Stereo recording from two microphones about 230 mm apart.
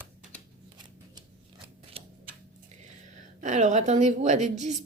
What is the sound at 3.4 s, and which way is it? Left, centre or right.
A woman's voice, right.